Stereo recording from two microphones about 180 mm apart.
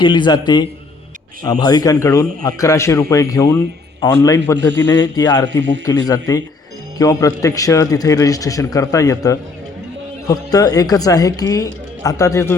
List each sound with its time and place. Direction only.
0.0 s a man's voice: 25° left (ahead or behind)